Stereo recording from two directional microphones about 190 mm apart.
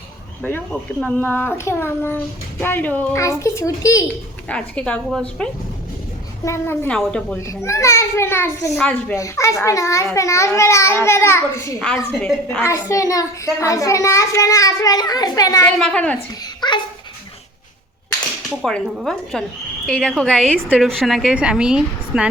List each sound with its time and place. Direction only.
0.4 s a child's voice: 5° left (ahead or behind)
7.3 s a child's voice: 15° left (ahead or behind)
15.6 s a child's voice: 5° left (ahead or behind)
16.4 s a sound: 25° left (ahead or behind)
18.6 s a woman's voice: centre (ahead or behind)